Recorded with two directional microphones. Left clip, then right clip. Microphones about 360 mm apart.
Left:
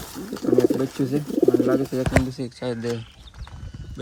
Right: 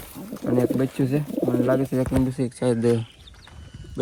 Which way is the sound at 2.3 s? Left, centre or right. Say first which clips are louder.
Right 5 dB; right.